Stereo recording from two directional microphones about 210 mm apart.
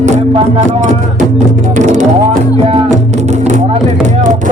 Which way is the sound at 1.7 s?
35° right (ahead or behind).